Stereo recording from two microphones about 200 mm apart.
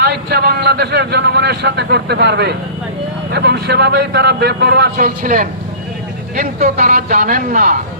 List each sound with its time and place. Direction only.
0.0 s a man's voice: 55° right (ahead or behind)